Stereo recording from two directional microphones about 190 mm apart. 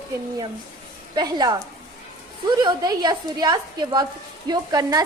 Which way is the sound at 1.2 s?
20° right (ahead or behind).